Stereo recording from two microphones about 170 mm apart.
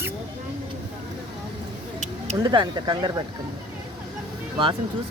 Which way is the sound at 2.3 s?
25° right (ahead or behind).